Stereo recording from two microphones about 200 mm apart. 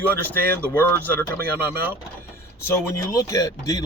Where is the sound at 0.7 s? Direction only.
10° left (ahead or behind).